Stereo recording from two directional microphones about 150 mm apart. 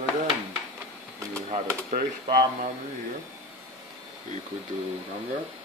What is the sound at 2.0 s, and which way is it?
Speech, 80° right.